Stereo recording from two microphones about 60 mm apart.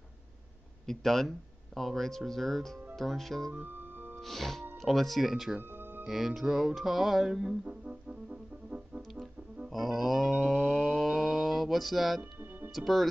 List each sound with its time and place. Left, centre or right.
0.8 s music: centre
3.5 s music: right
4.2 s music: centre
5.6 s music: right
6.0 s music: centre
7.6 s music: centre
9.7 s a sound: centre
12.2 s music: right
12.7 s music: centre